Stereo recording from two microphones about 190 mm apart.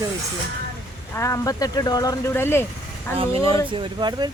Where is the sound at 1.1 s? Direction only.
15° left (ahead or behind).